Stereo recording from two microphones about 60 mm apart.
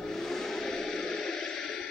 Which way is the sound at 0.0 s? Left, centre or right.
Centre.